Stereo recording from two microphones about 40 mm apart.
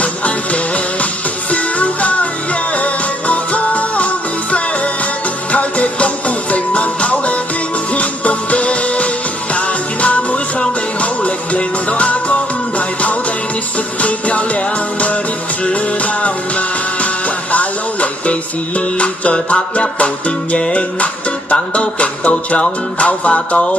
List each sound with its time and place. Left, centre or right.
0.0 s music: left